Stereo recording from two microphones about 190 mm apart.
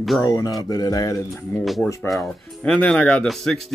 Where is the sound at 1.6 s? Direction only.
Centre (ahead or behind).